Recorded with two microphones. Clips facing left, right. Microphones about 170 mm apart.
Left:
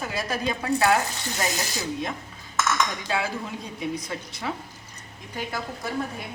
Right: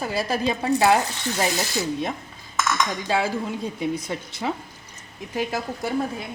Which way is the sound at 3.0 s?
35° right (ahead or behind).